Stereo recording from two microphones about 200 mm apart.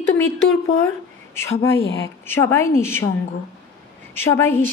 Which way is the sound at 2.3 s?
10° left (ahead or behind).